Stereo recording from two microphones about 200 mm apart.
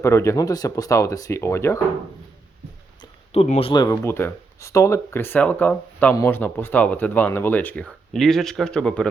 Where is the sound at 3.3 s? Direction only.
30° left (ahead or behind).